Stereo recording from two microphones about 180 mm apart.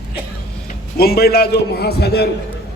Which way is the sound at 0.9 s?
60° left (ahead or behind).